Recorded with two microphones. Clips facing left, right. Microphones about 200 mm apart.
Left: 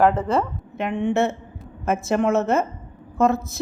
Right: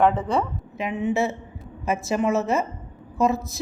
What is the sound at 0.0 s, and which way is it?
A woman's voice, centre (ahead or behind).